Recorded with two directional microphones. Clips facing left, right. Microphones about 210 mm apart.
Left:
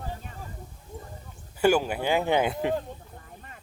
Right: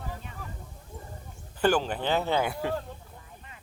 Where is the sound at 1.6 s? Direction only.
10° left (ahead or behind).